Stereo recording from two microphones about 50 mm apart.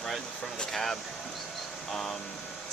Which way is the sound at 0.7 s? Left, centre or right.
Centre.